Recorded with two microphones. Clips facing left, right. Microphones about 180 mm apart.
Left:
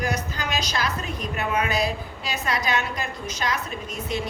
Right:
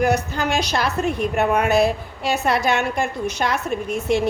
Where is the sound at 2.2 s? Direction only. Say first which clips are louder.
Right 8 dB; 65° right (ahead or behind).